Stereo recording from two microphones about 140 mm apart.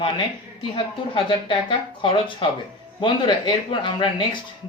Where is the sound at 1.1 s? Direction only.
35° left (ahead or behind).